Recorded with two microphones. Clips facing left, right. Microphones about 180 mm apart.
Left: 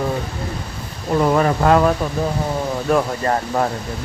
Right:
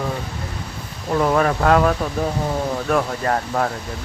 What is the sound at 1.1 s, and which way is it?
Speech, 5° left (ahead or behind).